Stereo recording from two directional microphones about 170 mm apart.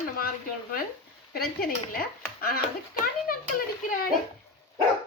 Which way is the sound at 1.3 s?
65° left (ahead or behind).